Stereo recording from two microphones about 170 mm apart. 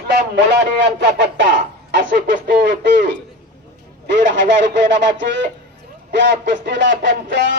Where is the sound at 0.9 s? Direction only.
90° right.